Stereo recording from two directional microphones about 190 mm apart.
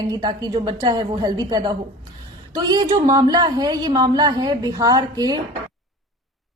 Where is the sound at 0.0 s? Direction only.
20° right (ahead or behind).